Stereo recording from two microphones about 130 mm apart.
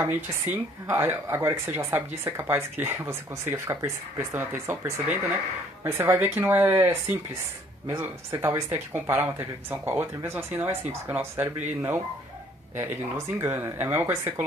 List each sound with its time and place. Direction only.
0.0 s speech: 15° right (ahead or behind)
13.4 s speech: 15° right (ahead or behind)